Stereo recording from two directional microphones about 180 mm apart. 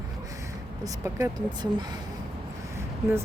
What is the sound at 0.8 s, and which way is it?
Speech, 15° right (ahead or behind).